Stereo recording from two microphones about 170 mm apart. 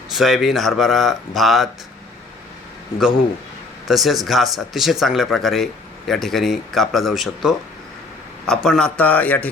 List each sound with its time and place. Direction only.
0.1 s speech: centre (ahead or behind)
3.8 s a man's voice: centre (ahead or behind)